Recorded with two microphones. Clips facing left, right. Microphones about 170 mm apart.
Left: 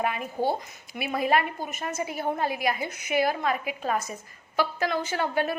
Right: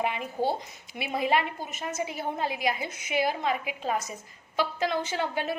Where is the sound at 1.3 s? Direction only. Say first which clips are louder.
Left 2 dB; 50° left (ahead or behind).